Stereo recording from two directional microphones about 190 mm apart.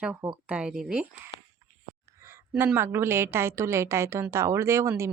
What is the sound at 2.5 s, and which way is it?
A woman's voice, 5° right (ahead or behind).